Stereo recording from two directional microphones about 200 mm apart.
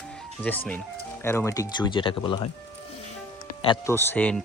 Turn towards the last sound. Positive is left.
turn(degrees=10)  # may be behind; listen again after turning